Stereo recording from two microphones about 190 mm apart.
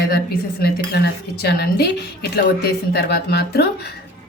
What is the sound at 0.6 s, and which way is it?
A woman's voice, 55° left (ahead or behind).